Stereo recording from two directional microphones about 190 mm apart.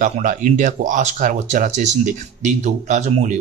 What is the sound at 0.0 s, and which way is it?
Speech, 45° right (ahead or behind).